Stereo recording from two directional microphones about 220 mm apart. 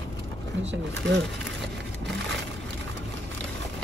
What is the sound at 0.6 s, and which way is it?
Speech, 55° right (ahead or behind).